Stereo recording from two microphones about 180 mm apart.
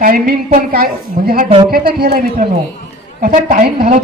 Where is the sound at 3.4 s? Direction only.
55° right (ahead or behind).